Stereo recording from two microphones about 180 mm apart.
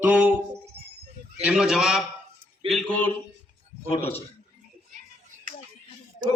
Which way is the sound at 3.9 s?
35° left (ahead or behind).